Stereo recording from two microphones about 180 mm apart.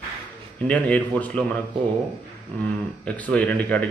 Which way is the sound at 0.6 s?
5° left (ahead or behind).